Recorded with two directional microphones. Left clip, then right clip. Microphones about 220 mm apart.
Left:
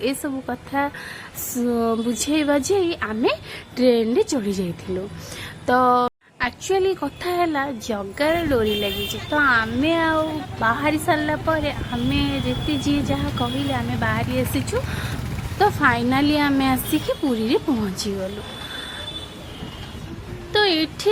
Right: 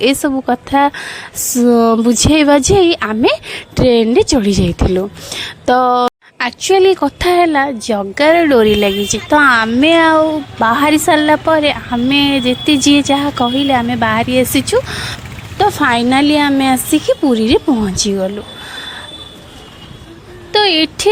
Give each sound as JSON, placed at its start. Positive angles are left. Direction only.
{"t": 0.0, "sound": "a woman's voice", "side_deg": -45}
{"t": 20.5, "sound": "speech", "side_deg": -40}